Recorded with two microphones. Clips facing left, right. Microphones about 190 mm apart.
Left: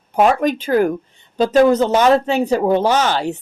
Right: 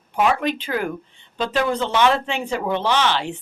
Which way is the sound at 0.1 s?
40° left (ahead or behind).